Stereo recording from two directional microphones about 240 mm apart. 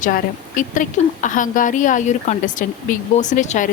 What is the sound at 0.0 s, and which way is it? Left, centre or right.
Speech, left.